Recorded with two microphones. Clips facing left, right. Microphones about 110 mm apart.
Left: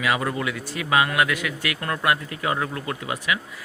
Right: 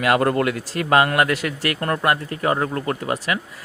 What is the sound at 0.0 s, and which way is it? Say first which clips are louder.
A man's voice: right 6 dB; 55° right (ahead or behind).